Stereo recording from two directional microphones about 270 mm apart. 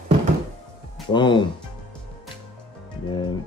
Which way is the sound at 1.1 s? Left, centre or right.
Centre.